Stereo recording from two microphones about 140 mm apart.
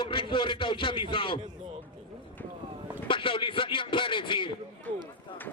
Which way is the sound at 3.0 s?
40° left (ahead or behind).